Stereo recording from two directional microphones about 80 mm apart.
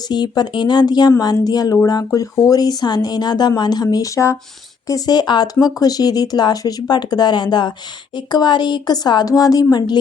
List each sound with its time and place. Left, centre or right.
0.1 s speech: left
2.0 s a woman's voice: left
4.9 s speech: left